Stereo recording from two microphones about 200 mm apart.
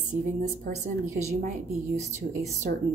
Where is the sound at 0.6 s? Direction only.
35° right (ahead or behind).